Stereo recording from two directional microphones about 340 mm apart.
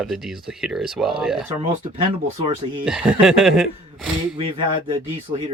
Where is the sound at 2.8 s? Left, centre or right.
Centre.